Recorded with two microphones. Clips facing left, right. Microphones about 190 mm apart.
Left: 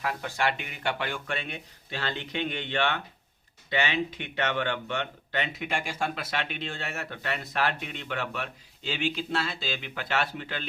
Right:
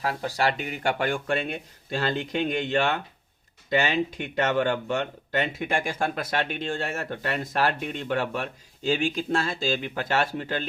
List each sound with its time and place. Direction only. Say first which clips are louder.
0.0 s speech: right 3 dB; 35° right (ahead or behind)